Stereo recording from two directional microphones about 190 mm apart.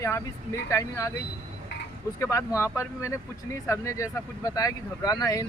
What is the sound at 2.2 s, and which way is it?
Speech, 15° left (ahead or behind).